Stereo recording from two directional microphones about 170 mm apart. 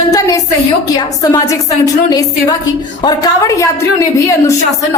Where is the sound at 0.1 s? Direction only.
20° left (ahead or behind).